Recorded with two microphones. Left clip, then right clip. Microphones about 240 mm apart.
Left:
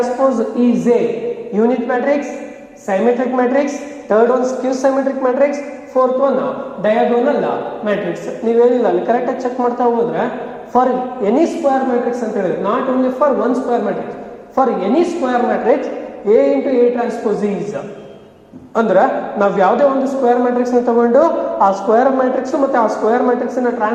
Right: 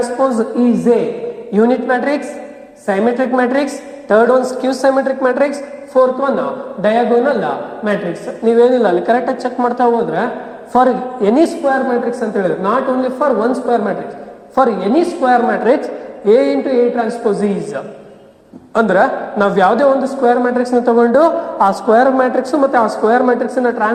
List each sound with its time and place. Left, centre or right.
0.0 s a man's voice: right
18.7 s a man's voice: right